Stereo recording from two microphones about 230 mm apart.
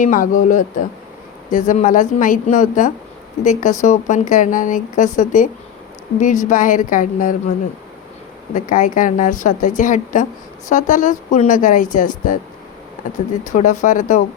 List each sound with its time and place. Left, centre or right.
0.0 s speech: left
8.5 s speech: left
13.5 s speech: left